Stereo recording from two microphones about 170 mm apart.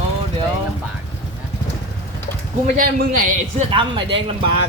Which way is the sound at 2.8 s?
55° right (ahead or behind).